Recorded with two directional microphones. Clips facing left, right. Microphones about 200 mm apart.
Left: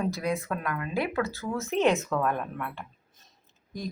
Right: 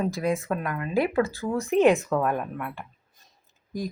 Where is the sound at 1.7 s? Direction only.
Centre (ahead or behind).